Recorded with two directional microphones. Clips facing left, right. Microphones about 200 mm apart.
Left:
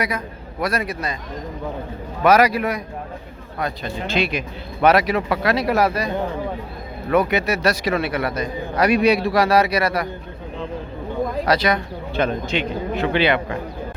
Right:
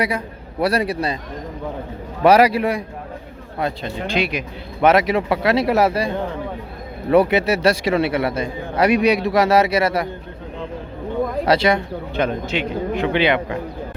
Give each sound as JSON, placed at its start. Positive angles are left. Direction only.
{"t": 0.6, "sound": "a man's voice", "side_deg": -30}
{"t": 2.2, "sound": "a man's voice", "side_deg": -30}
{"t": 4.0, "sound": "a man's voice", "side_deg": -15}
{"t": 7.1, "sound": "a man's voice", "side_deg": -30}
{"t": 11.4, "sound": "a man's voice", "side_deg": -25}
{"t": 12.2, "sound": "speech", "side_deg": -10}